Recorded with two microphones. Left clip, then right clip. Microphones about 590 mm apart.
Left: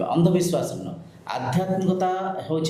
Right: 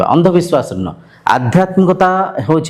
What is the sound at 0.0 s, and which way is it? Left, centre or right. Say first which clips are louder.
Speech: right 11 dB; right.